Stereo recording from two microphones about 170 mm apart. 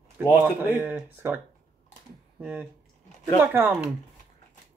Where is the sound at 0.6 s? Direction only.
10° right (ahead or behind).